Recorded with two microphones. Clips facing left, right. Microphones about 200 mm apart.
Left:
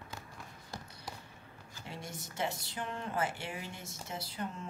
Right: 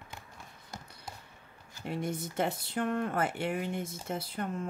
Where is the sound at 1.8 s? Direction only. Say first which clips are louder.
Right 11 dB; 55° right (ahead or behind).